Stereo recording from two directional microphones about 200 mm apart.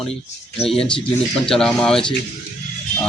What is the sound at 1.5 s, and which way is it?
Speech, 5° left (ahead or behind).